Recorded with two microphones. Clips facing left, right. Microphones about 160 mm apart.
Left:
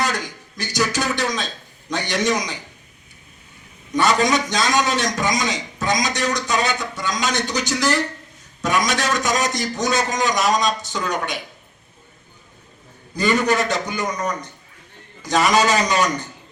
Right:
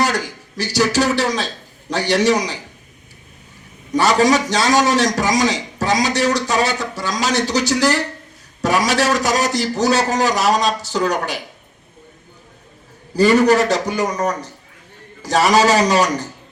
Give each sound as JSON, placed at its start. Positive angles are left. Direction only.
{"t": 0.0, "sound": "a man's voice", "side_deg": -35}
{"t": 3.9, "sound": "a man's voice", "side_deg": -35}
{"t": 13.1, "sound": "a man's voice", "side_deg": -35}